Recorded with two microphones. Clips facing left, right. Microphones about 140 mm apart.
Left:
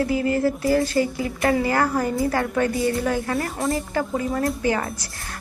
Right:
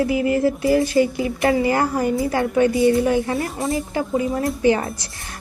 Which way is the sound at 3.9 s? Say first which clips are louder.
Right 2 dB; 20° right (ahead or behind).